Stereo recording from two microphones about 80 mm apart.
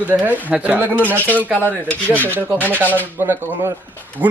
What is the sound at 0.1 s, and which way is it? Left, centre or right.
Speech, right.